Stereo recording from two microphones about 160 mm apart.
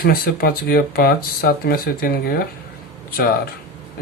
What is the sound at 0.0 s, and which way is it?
Speech, 70° left (ahead or behind).